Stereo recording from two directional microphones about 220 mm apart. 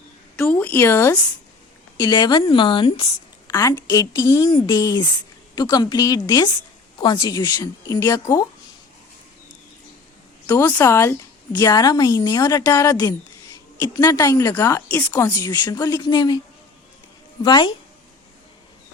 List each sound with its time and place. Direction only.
0.3 s a woman's voice: 5° left (ahead or behind)
10.4 s a woman's voice: 15° left (ahead or behind)
17.4 s a woman's voice: 20° left (ahead or behind)